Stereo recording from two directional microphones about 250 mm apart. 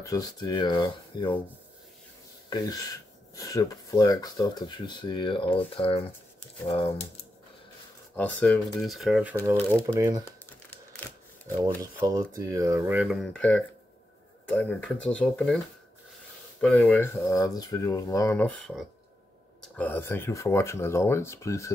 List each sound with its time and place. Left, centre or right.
0.0 s speech: centre
2.5 s speech: centre
8.2 s speech: centre
10.7 s a sound: centre
11.8 s speech: centre
16.6 s speech: centre